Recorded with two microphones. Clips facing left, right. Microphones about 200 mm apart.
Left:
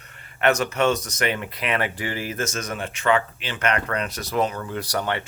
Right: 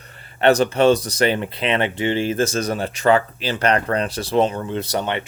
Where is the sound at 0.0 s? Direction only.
35° right (ahead or behind).